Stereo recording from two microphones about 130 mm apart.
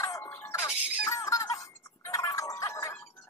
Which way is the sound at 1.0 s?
25° left (ahead or behind).